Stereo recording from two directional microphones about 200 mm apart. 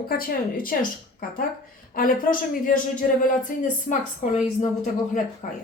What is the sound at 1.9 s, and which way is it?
A woman's voice, 45° left (ahead or behind).